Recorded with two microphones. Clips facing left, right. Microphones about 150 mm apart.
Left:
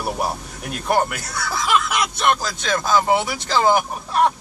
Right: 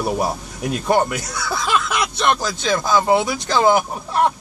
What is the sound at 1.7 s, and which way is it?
Speech, 5° left (ahead or behind).